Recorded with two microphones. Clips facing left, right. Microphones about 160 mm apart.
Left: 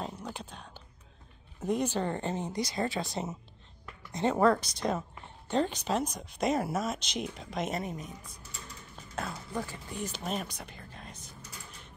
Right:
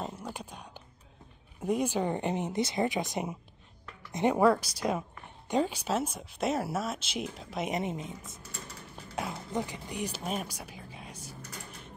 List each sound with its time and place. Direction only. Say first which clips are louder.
0.0 s whispering: right 1 dB; 10° right (ahead or behind)
1.6 s speech: right 1 dB; 10° right (ahead or behind)
7.7 s a woman's voice: right 3 dB; 25° right (ahead or behind)
8.9 s speech: right 2 dB; 10° right (ahead or behind)